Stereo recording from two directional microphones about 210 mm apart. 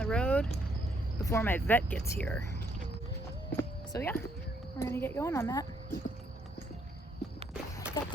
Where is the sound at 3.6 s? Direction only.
15° left (ahead or behind).